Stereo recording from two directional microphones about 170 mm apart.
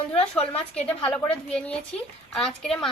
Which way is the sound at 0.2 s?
35° left (ahead or behind).